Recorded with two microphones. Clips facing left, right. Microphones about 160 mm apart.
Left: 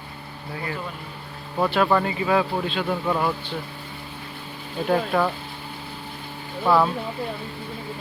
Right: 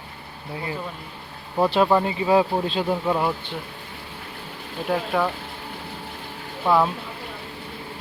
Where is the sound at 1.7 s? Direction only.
20° right (ahead or behind).